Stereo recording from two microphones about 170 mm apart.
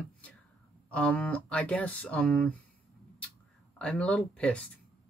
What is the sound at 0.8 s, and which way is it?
Speech, 10° left (ahead or behind).